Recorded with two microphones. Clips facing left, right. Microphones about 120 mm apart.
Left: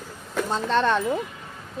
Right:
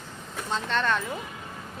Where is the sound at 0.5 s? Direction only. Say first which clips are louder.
Left 4 dB; 35° left (ahead or behind).